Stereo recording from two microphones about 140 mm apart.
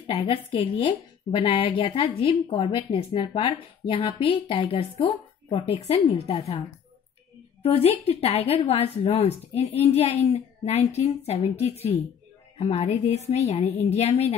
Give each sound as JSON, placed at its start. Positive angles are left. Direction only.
{"t": 0.0, "sound": "a woman's voice", "side_deg": 40}
{"t": 7.6, "sound": "a woman's voice", "side_deg": 45}